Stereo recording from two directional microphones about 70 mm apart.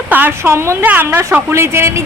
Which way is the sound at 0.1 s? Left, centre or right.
Right.